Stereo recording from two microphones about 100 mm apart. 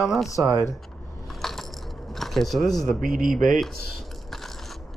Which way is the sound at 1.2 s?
Centre (ahead or behind).